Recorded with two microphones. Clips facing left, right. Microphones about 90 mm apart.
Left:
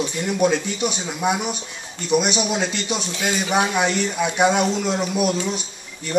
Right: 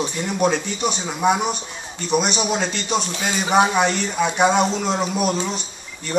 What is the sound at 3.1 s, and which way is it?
Speech, 35° right (ahead or behind).